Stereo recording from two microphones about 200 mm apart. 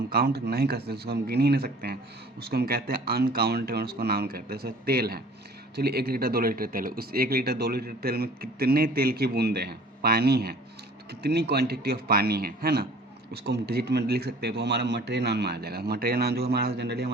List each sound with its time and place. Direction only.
0.1 s a man's voice: 50° right (ahead or behind)